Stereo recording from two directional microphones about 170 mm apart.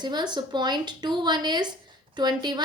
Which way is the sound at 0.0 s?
25° right (ahead or behind).